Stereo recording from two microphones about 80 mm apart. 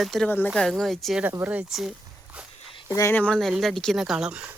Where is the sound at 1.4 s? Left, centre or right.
Centre.